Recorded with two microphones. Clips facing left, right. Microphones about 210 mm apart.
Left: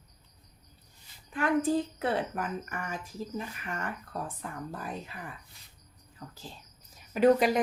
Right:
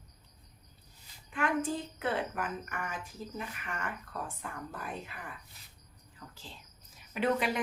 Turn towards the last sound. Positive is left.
turn(degrees=40)  # may be behind; listen again after turning